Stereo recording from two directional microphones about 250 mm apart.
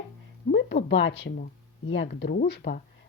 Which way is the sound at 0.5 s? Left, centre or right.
Left.